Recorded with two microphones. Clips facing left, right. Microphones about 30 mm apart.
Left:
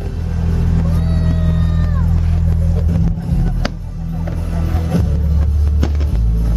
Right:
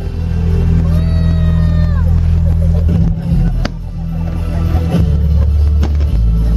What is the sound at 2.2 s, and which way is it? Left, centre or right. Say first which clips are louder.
Vehicle: right 3 dB; centre.